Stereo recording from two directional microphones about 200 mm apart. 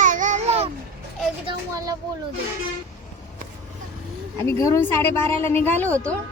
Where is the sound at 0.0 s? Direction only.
40° right (ahead or behind).